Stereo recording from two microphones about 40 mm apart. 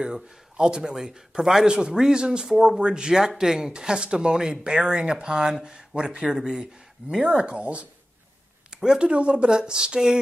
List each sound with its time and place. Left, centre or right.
0.0 s a man's voice: centre
1.7 s speech: right
8.6 s a sound: centre
9.1 s speech: right